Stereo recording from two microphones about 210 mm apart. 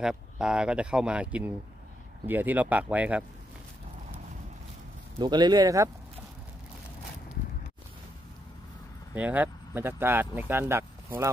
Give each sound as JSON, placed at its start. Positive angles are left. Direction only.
{"t": 0.0, "sound": "speech", "side_deg": -5}
{"t": 5.2, "sound": "speech", "side_deg": -20}
{"t": 9.1, "sound": "speech", "side_deg": -5}